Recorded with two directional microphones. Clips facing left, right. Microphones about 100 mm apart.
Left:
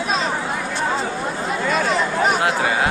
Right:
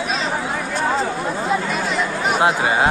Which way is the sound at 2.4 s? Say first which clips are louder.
Right 2 dB; 25° right (ahead or behind).